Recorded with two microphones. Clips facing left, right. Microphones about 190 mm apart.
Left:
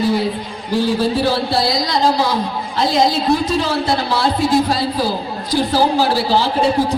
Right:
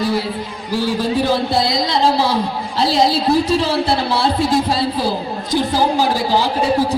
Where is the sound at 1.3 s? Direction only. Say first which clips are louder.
Right 1 dB; 20° right (ahead or behind).